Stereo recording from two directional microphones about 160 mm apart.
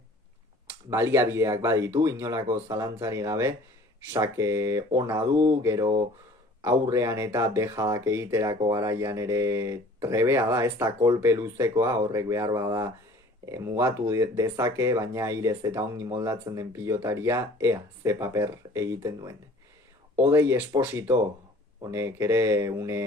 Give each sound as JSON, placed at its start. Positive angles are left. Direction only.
{"t": 0.9, "sound": "speech", "side_deg": -15}